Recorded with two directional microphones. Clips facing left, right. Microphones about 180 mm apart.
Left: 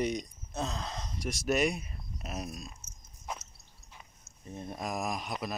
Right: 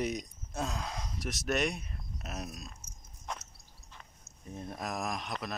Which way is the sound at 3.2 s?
5° left (ahead or behind).